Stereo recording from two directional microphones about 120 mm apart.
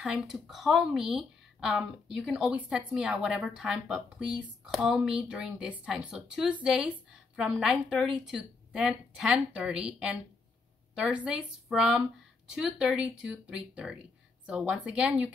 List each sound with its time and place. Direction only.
0.0 s speech: 5° right (ahead or behind)